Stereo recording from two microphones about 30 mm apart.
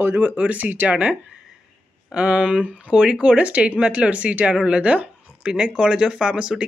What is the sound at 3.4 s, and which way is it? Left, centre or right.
Speech, right.